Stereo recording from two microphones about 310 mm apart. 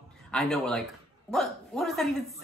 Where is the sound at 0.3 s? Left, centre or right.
Centre.